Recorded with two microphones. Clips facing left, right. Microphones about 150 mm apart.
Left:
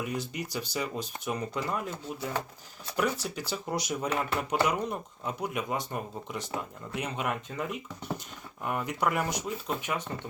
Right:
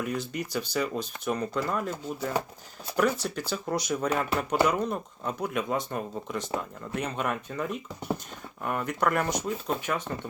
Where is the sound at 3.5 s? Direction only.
15° left (ahead or behind).